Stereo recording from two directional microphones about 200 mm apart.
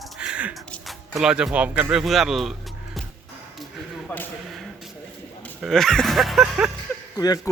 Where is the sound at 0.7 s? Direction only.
Centre (ahead or behind).